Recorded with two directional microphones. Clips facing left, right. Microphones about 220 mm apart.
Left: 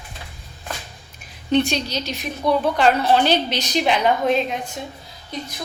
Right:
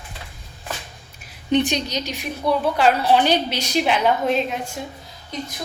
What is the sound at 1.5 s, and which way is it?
A woman's voice, 15° right (ahead or behind).